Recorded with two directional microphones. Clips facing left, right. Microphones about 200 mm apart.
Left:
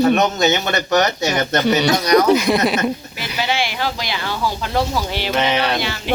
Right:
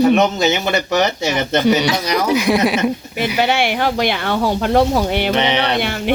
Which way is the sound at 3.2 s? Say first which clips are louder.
Right 6 dB; 60° right (ahead or behind).